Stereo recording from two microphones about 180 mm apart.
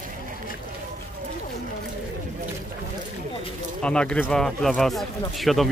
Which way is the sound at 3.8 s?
5° left (ahead or behind).